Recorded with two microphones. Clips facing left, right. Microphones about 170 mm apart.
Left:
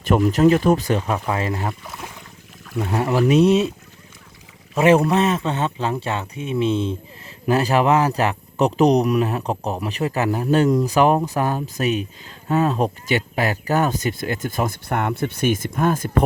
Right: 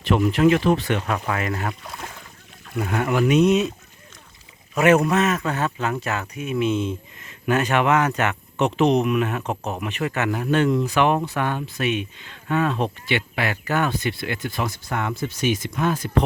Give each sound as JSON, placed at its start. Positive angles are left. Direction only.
{"t": 0.0, "sound": "speech", "side_deg": 45}
{"t": 1.0, "sound": "speech", "side_deg": 20}
{"t": 1.8, "sound": "speech", "side_deg": 0}
{"t": 2.8, "sound": "speech", "side_deg": 30}
{"t": 4.7, "sound": "a man's voice", "side_deg": 30}